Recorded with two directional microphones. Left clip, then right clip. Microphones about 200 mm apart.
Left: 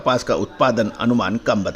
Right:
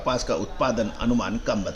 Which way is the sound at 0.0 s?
30° left (ahead or behind).